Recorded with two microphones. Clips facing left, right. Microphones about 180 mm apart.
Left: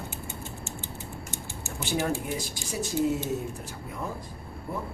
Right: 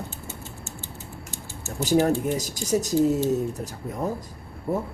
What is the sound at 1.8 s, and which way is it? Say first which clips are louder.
Speech: right 8 dB; 40° right (ahead or behind).